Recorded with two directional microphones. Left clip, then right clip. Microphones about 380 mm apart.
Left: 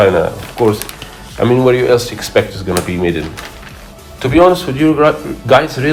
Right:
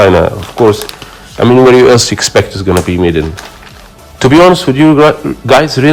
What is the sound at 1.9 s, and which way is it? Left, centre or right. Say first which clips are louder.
Speech: right 4 dB; right.